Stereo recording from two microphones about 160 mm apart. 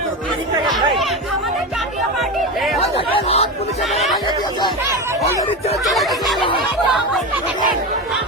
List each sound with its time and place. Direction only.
2.8 s chatter: 40° left (ahead or behind)
5.8 s snicker: centre (ahead or behind)